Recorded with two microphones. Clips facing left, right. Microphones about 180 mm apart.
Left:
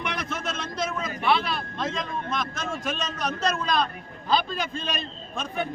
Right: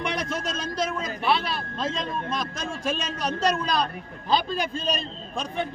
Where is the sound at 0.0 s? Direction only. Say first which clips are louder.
Right 2 dB; 30° right (ahead or behind).